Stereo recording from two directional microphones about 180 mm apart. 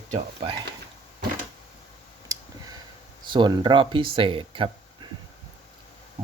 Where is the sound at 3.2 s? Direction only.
25° right (ahead or behind).